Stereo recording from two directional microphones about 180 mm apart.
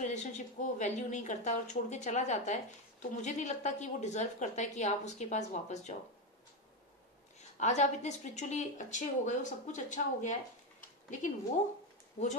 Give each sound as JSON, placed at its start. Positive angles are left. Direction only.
{"t": 0.0, "sound": "a woman's voice", "side_deg": 40}
{"t": 7.5, "sound": "a woman's voice", "side_deg": 40}
{"t": 12.2, "sound": "a woman's voice", "side_deg": 40}